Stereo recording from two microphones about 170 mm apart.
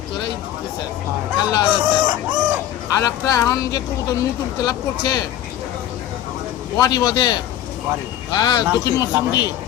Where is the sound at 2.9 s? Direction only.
15° left (ahead or behind).